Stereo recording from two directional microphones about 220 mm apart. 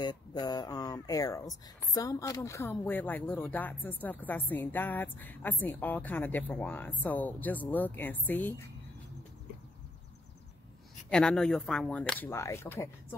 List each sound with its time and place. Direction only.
0.0 s speech: 20° left (ahead or behind)
11.1 s speech: 5° left (ahead or behind)